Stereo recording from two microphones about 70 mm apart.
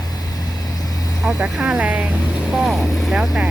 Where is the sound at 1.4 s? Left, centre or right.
Centre.